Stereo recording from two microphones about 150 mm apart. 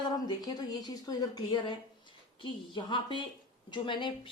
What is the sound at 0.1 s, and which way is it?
A woman's voice, 25° left (ahead or behind).